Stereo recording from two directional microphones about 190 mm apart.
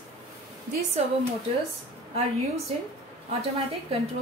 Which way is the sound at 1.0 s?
35° right (ahead or behind).